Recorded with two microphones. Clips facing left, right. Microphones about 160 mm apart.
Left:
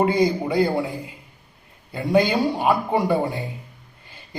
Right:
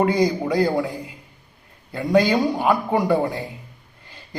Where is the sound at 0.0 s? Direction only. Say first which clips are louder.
Even; 25° left (ahead or behind).